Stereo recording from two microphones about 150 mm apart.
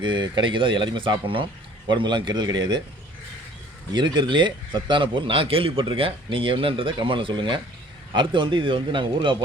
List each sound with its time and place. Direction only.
0.0 s a man's voice: 30° right (ahead or behind)
3.9 s a man's voice: 30° right (ahead or behind)